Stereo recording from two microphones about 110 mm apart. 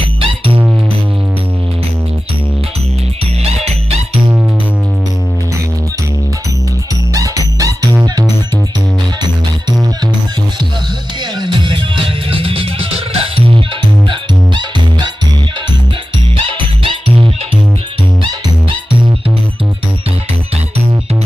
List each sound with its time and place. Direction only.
0.0 s music: 55° right (ahead or behind)
3.4 s music: 75° right (ahead or behind)
7.1 s music: 30° right (ahead or behind)
11.3 s music: 45° right (ahead or behind)
14.1 s music: 45° right (ahead or behind)
16.5 s music: 55° right (ahead or behind)